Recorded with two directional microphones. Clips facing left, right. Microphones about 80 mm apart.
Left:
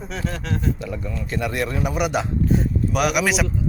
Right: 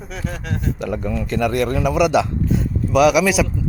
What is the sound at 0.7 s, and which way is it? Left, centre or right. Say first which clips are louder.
Speech: right 6 dB; right.